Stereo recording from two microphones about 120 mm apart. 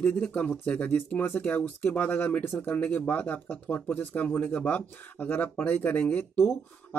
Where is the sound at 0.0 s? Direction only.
10° left (ahead or behind).